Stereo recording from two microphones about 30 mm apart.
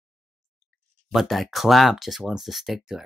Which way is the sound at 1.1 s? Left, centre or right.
Centre.